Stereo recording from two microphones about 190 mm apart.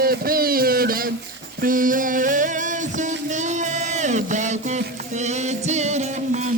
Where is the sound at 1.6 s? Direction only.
45° right (ahead or behind).